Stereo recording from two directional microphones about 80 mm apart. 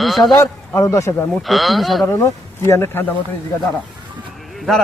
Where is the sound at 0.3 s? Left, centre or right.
Left.